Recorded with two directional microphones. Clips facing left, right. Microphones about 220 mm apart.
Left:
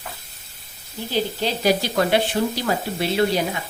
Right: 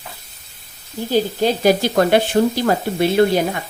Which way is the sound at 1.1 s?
45° right (ahead or behind).